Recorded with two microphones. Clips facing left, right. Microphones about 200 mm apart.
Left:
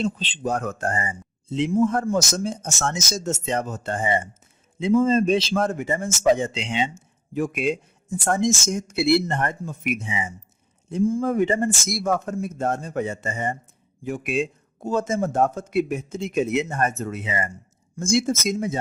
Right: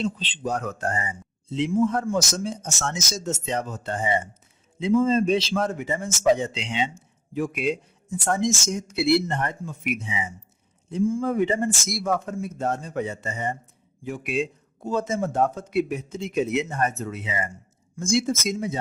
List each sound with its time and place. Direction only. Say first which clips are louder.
0.0 s a man's voice: left 2 dB; 50° left (ahead or behind)